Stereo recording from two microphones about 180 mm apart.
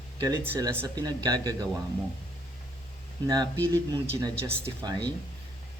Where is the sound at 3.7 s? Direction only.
20° right (ahead or behind).